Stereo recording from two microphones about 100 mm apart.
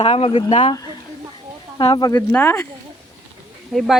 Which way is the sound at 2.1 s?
20° left (ahead or behind).